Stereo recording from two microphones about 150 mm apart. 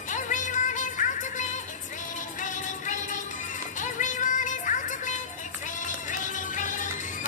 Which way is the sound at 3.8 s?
55° left (ahead or behind).